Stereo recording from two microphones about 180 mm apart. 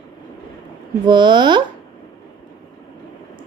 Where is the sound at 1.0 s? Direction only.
25° right (ahead or behind).